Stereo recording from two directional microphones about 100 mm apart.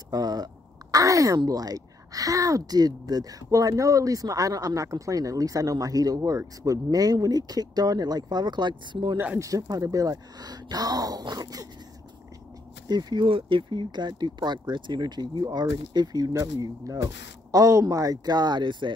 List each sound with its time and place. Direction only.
0.1 s speech: 40° right (ahead or behind)
9.4 s speech: 35° right (ahead or behind)
12.8 s speech: 45° right (ahead or behind)